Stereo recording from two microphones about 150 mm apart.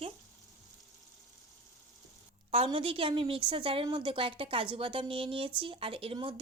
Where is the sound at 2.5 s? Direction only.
40° right (ahead or behind).